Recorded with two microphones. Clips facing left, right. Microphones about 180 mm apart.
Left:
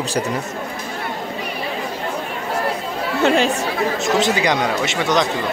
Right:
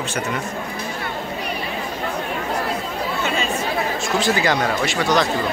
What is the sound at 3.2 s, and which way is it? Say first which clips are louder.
Chatter: left 9 dB; 75° left (ahead or behind).